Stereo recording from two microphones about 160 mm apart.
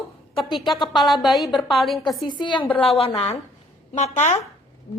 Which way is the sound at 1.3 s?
Centre (ahead or behind).